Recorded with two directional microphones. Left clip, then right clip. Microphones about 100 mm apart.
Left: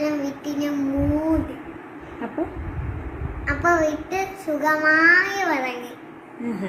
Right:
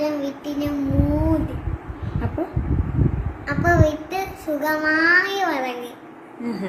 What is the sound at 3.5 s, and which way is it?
A woman's voice, 20° right (ahead or behind).